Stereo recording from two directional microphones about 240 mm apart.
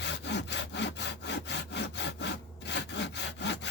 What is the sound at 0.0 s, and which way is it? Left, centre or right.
Sawing, left.